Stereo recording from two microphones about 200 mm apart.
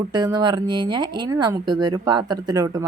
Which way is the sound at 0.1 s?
20° right (ahead or behind).